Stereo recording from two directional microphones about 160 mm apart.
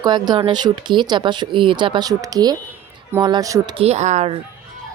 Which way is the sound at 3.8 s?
45° right (ahead or behind).